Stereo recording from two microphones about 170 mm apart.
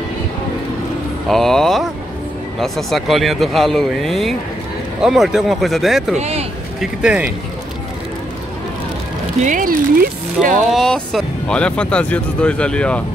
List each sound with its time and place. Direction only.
1.3 s speech: centre (ahead or behind)
6.1 s speech: 40° right (ahead or behind)
6.8 s speech: 5° right (ahead or behind)
9.4 s speech: 50° right (ahead or behind)
10.4 s speech: centre (ahead or behind)